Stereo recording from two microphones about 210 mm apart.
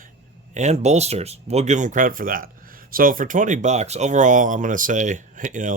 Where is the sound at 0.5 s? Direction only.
30° right (ahead or behind).